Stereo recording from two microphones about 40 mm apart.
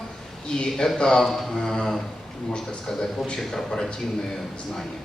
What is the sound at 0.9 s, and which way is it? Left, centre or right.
A man's voice, centre.